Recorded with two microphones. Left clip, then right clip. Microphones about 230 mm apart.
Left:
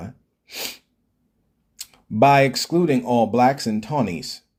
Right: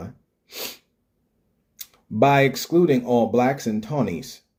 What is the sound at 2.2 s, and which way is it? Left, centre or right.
Speech, left.